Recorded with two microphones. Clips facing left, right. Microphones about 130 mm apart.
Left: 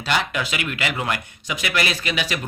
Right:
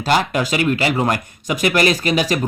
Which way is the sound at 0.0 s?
40° right (ahead or behind).